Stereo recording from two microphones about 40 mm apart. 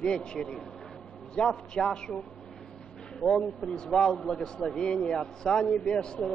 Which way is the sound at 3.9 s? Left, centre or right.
Centre.